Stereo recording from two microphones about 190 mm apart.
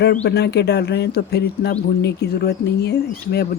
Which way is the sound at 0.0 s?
60° left (ahead or behind).